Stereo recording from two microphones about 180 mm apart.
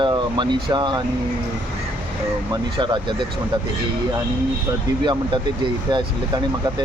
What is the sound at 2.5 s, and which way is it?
Speech, 25° right (ahead or behind).